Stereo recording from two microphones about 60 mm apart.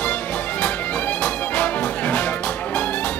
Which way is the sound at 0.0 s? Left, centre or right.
Left.